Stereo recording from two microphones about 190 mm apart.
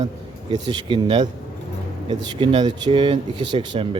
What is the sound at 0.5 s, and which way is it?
Speech, 25° right (ahead or behind).